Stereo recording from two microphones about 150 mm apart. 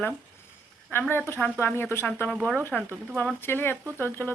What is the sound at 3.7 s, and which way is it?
Speech, 15° right (ahead or behind).